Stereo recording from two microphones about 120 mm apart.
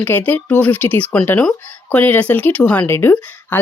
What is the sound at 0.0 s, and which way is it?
Speech, 15° left (ahead or behind).